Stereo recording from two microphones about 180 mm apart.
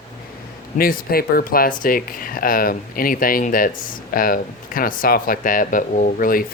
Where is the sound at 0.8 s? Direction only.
55° left (ahead or behind).